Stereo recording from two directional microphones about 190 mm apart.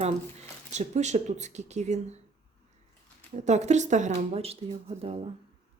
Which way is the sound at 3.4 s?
35° right (ahead or behind).